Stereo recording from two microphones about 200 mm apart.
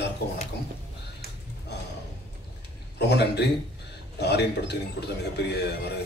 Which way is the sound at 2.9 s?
55° left (ahead or behind).